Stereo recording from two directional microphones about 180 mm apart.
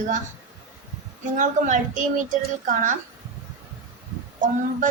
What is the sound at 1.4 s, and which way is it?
Speech, 45° right (ahead or behind).